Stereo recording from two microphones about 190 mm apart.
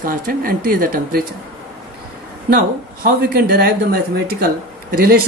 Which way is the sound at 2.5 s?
55° right (ahead or behind).